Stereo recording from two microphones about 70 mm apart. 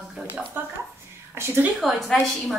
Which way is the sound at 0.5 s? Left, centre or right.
Right.